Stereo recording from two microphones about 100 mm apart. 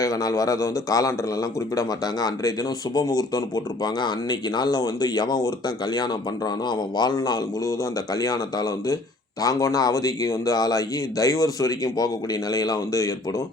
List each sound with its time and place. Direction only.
0.0 s speech: 35° left (ahead or behind)